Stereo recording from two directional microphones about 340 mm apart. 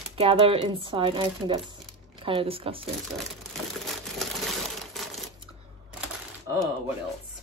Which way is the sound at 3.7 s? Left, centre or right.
Centre.